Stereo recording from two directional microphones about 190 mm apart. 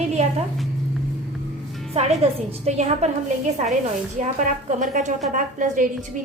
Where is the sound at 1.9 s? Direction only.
35° right (ahead or behind).